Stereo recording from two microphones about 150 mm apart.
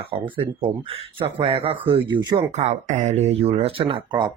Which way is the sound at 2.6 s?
50° right (ahead or behind).